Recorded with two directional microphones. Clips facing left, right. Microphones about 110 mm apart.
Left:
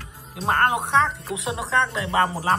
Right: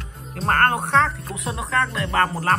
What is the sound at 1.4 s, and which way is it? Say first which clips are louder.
Speech: even; 25° left (ahead or behind).